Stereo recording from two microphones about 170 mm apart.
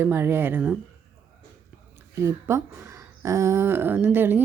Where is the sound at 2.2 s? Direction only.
15° right (ahead or behind).